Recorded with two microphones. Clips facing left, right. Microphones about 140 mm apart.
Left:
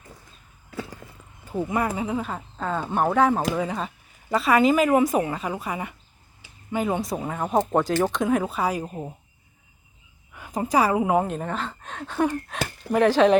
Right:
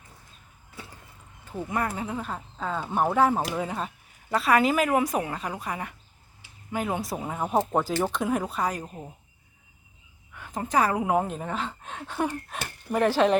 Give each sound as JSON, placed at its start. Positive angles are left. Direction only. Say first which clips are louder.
{"t": 0.7, "sound": "a sound", "louder": "left 10 dB", "side_deg": 90}
{"t": 1.5, "sound": "speech", "louder": "left 4 dB", "side_deg": 10}
{"t": 8.9, "sound": "speech", "louder": "left 7 dB", "side_deg": 25}
{"t": 10.3, "sound": "speech", "louder": "left 3 dB", "side_deg": 10}
{"t": 11.4, "sound": "speech", "louder": "left 2 dB", "side_deg": -15}
{"t": 12.3, "sound": "speech", "louder": "left 6 dB", "side_deg": 90}
{"t": 12.9, "sound": "speech", "louder": "left 4 dB", "side_deg": -10}